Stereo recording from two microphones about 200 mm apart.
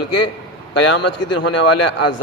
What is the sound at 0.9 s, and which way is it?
Speech, 65° left (ahead or behind).